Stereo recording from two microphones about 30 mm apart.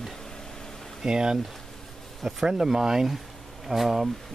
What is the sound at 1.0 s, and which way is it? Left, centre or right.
Speech, right.